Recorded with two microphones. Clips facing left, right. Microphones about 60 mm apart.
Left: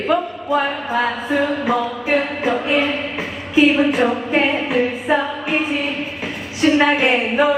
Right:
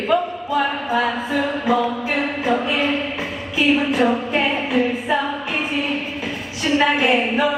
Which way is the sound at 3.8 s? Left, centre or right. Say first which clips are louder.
Left 2 dB; centre.